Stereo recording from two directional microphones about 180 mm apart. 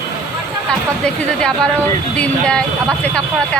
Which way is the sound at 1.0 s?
5° left (ahead or behind).